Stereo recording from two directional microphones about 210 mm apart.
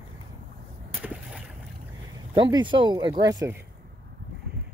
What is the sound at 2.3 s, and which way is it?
Speech, 20° right (ahead or behind).